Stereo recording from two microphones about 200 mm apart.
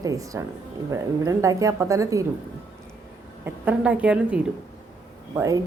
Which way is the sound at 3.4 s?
10° right (ahead or behind).